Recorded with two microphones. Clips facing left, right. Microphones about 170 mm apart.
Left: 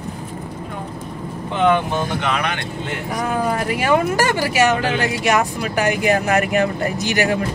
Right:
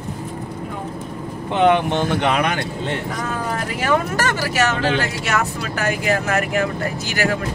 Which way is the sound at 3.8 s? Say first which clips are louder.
Left 2 dB; 15° left (ahead or behind).